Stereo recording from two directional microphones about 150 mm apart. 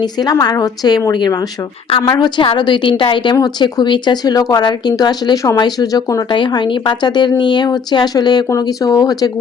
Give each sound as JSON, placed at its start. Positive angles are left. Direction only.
{"t": 0.0, "sound": "a woman's voice", "side_deg": 25}